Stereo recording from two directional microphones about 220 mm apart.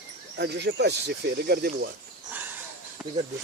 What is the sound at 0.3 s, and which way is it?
Speech, 50° right (ahead or behind).